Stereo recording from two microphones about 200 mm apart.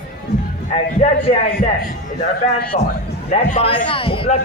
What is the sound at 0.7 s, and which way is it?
Speech, 30° left (ahead or behind).